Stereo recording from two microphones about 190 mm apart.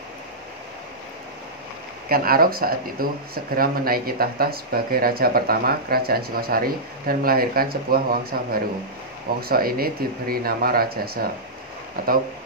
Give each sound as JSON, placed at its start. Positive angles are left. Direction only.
{"t": 2.0, "sound": "speech", "side_deg": -50}